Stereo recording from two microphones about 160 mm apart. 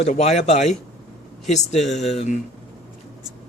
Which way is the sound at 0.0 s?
45° left (ahead or behind).